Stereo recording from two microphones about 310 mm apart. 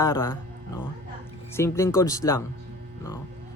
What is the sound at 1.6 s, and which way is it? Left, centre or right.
Speech, centre.